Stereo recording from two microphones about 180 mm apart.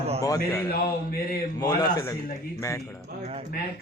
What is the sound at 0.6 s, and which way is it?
Mantra, 60° left (ahead or behind).